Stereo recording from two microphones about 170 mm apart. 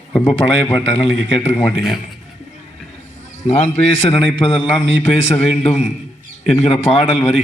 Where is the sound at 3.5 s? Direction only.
40° left (ahead or behind).